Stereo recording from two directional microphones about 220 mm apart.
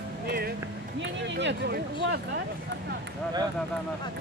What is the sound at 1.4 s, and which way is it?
Speech, 50° right (ahead or behind).